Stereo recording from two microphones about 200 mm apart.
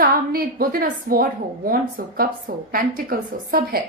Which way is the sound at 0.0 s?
45° right (ahead or behind).